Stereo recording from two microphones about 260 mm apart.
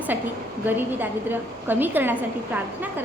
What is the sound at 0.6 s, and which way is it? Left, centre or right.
A woman's voice, centre.